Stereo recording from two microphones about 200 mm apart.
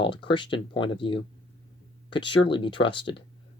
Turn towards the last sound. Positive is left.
turn(degrees=25)  # may be behind; listen again after turning